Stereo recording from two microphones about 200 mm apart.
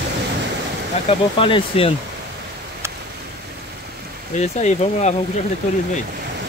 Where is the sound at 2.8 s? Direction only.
15° right (ahead or behind).